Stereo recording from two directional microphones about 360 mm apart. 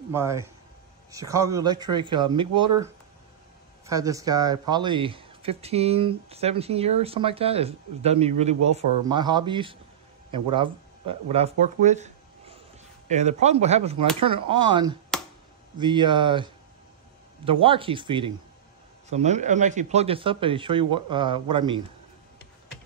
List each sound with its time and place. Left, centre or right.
0.1 s speech: centre
3.8 s speech: centre